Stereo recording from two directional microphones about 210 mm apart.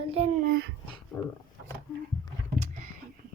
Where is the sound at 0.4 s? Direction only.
50° right (ahead or behind).